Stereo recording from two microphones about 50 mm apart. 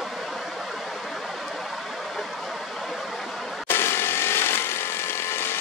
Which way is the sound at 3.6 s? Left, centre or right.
Left.